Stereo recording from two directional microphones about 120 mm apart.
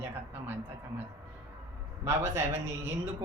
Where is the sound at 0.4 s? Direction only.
15° right (ahead or behind).